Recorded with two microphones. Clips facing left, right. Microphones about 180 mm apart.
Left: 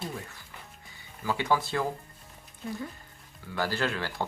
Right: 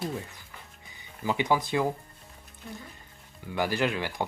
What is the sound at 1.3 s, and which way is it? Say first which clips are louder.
Speech: right 2 dB; 20° right (ahead or behind).